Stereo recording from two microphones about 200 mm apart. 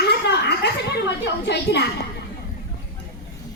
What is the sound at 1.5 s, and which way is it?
Speech, 60° left (ahead or behind).